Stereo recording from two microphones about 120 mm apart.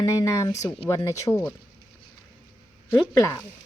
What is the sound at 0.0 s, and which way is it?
Speech, 25° left (ahead or behind).